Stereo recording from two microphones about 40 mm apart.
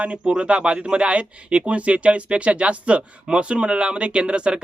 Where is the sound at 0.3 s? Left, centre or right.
Right.